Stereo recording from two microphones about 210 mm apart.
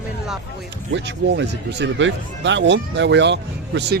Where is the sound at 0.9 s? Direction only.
55° right (ahead or behind).